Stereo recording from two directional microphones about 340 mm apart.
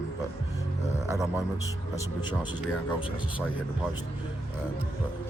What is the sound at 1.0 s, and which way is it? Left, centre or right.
Music, centre.